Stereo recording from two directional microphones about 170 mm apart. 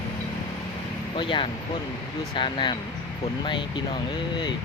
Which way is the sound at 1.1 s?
30° left (ahead or behind).